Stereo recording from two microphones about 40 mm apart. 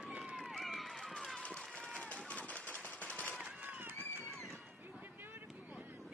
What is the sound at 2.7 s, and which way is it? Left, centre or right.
Machine gun, left.